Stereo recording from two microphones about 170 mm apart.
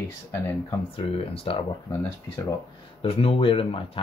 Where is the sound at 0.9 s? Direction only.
35° left (ahead or behind).